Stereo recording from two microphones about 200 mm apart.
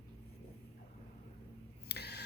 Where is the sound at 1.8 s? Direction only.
55° left (ahead or behind).